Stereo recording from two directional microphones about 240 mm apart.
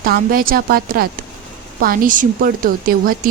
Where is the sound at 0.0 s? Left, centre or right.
Right.